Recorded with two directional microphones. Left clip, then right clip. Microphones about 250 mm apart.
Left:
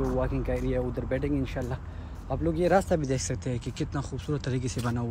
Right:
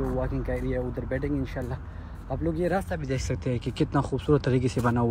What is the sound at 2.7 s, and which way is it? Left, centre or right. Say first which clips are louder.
Speech: left 5 dB; left.